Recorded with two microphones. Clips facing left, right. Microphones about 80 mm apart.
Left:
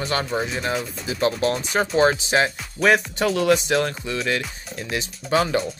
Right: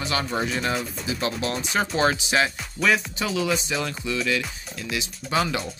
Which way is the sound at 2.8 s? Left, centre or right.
Left.